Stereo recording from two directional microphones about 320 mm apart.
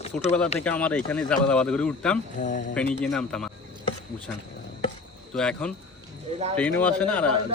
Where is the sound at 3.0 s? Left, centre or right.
Centre.